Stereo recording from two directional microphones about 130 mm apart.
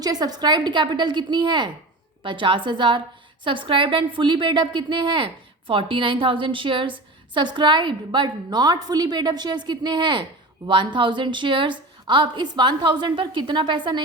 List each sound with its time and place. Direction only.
0.0 s a woman's voice: 30° right (ahead or behind)